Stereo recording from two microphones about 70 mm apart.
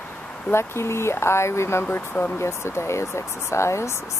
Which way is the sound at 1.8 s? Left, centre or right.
Left.